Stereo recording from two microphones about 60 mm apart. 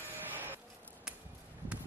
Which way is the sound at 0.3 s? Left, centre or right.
Right.